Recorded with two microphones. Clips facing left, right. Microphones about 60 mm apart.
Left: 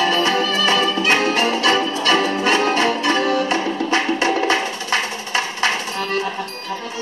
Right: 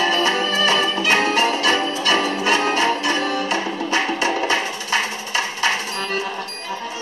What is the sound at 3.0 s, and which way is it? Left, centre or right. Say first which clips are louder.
Music: left 3 dB; left.